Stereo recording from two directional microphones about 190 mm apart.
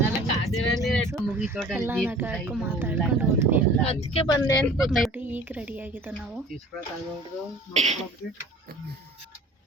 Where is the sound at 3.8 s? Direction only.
30° left (ahead or behind).